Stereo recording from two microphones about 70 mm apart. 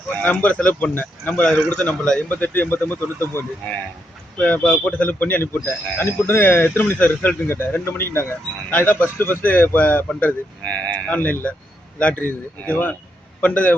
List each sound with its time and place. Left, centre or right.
0.1 s speech: left
1.5 s a man's voice: centre; by 3.4 s left
4.4 s speech: centre